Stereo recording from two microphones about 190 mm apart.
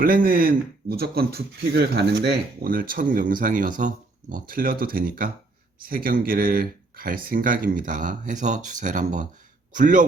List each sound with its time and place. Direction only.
0.0 s speech: 50° right (ahead or behind)